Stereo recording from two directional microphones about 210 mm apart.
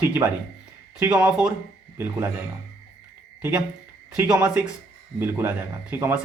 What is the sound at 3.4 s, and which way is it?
Speech, 10° right (ahead or behind).